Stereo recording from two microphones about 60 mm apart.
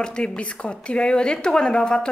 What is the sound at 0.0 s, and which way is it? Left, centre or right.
A woman's voice, centre.